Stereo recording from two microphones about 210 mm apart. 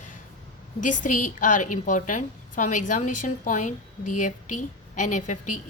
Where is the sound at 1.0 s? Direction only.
40° left (ahead or behind).